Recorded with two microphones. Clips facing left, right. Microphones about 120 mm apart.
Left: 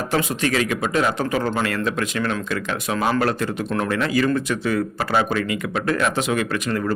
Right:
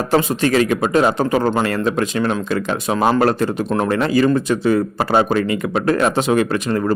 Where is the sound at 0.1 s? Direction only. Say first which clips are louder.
Right 6 dB; 35° right (ahead or behind).